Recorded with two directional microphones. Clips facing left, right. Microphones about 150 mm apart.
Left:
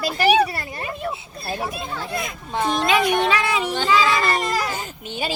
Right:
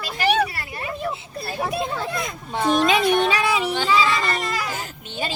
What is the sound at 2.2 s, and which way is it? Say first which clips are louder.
Speech: left 1 dB; 5° left (ahead or behind).